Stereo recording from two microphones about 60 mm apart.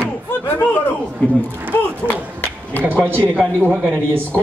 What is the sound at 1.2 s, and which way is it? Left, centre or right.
Speech, left.